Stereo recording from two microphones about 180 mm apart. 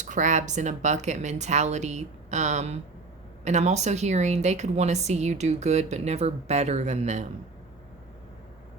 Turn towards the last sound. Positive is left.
turn(degrees=-40)  # may be behind; listen again after turning